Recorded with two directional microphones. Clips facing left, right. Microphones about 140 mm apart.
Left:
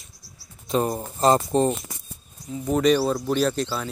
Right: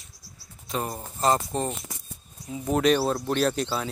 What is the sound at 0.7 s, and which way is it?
Speech, 25° left (ahead or behind).